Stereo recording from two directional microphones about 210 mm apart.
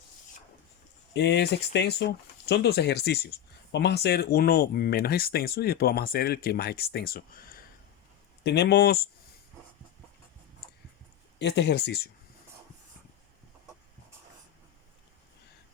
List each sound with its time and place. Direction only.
1.1 s speech: 55° left (ahead or behind)
8.4 s speech: 55° left (ahead or behind)
11.3 s speech: 55° left (ahead or behind)